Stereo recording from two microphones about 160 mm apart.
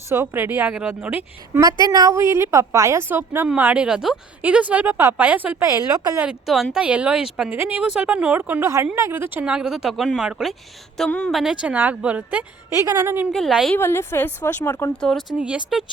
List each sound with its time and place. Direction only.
0.1 s a woman's voice: 15° right (ahead or behind)
5.6 s a woman's voice: 20° right (ahead or behind)
6.1 s a woman's voice: 5° right (ahead or behind)
13.3 s speech: centre (ahead or behind)
13.7 s a woman's voice: 15° left (ahead or behind)
15.4 s a woman's voice: 5° right (ahead or behind)